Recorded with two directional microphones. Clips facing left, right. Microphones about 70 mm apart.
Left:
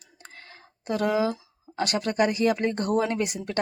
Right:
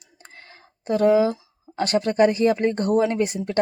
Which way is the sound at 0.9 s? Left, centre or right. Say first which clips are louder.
Right 7 dB; right.